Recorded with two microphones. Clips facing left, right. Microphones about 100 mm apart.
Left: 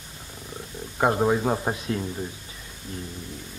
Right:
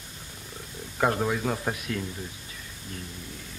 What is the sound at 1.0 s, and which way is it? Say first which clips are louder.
A man's voice: left 4 dB; 25° left (ahead or behind).